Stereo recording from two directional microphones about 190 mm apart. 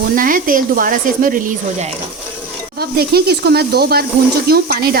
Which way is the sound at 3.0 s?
55° right (ahead or behind).